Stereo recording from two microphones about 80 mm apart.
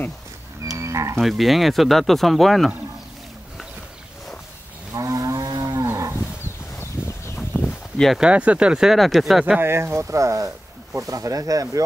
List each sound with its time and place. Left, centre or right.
0.7 s livestock: right
1.1 s speech: centre
4.9 s moo: right
7.0 s a sound: centre
8.2 s speech: centre
9.6 s speech: right